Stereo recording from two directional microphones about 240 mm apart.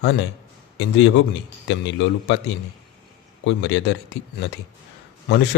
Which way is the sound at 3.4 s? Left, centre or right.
Left.